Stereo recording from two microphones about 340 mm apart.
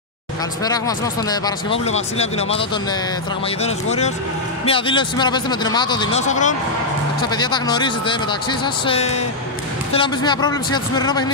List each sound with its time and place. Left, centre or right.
0.7 s speech: centre
3.6 s speech: centre